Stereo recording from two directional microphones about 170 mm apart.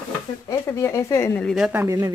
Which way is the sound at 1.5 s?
5° right (ahead or behind).